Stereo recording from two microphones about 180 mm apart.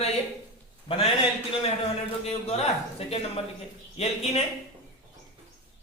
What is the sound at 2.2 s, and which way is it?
A man's voice, 35° left (ahead or behind).